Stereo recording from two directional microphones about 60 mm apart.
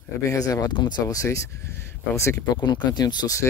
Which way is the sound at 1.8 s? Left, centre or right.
Left.